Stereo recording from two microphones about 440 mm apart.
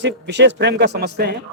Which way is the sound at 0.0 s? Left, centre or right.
Right.